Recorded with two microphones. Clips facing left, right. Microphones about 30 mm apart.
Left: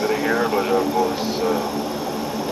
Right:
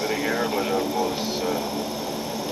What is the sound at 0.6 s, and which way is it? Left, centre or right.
Speech, left.